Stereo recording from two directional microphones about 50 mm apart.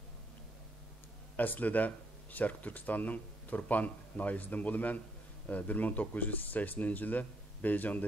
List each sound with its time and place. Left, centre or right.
1.3 s speech: left